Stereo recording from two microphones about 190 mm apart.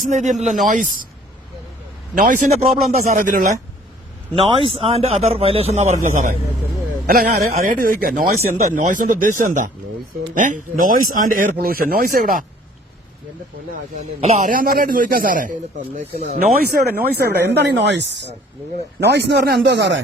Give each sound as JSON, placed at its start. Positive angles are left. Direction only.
{"t": 0.1, "sound": "a man's voice", "side_deg": -40}
{"t": 2.1, "sound": "speech", "side_deg": -45}
{"t": 4.4, "sound": "a man's voice", "side_deg": -30}
{"t": 7.5, "sound": "speech", "side_deg": -45}
{"t": 13.9, "sound": "speech", "side_deg": -35}